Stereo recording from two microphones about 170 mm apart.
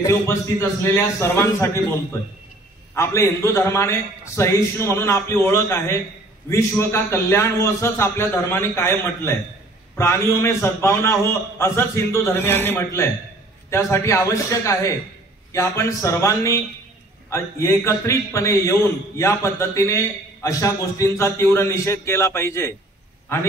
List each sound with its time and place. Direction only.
0.0 s a man's voice: 15° left (ahead or behind)
2.9 s a man's voice: 15° left (ahead or behind)